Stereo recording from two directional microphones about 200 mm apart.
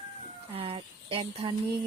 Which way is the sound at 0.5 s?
30° right (ahead or behind).